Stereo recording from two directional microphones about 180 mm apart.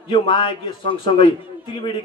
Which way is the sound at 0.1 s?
25° left (ahead or behind).